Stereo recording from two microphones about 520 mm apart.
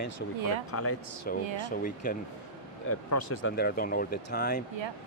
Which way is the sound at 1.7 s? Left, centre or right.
Centre.